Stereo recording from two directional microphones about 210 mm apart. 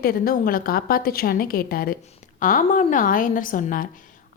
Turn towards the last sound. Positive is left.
turn(degrees=40)  # may be behind; listen again after turning